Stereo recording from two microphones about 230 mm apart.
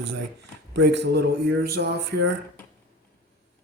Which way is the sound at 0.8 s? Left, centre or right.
Right.